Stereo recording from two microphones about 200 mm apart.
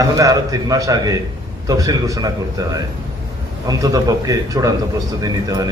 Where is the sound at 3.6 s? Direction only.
20° right (ahead or behind).